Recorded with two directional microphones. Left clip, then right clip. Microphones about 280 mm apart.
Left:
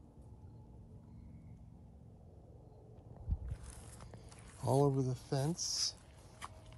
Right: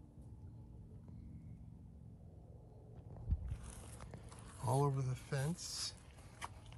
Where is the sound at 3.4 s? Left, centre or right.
Right.